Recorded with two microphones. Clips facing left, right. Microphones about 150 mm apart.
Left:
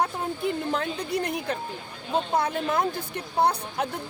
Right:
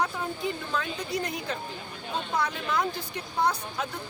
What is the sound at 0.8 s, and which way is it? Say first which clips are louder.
Speech: left 3 dB; 60° left (ahead or behind).